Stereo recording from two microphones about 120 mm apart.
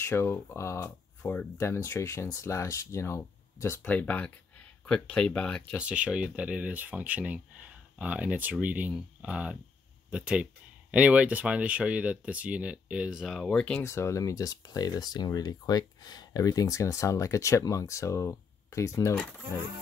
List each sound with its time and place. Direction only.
0.0 s speech: 20° left (ahead or behind)
5.8 s speech: 10° right (ahead or behind)
13.5 s speech: 10° left (ahead or behind)
13.8 s speech: 25° left (ahead or behind)